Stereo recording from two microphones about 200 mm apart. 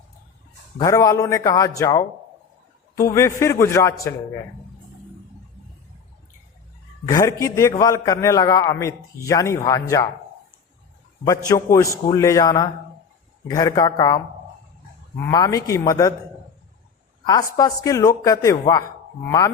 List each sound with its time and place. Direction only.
0.8 s a man's voice: 15° left (ahead or behind)
7.1 s a man's voice: 15° left (ahead or behind)
11.3 s a man's voice: 15° left (ahead or behind)
15.3 s a man's voice: 20° left (ahead or behind)
17.2 s a man's voice: 20° left (ahead or behind)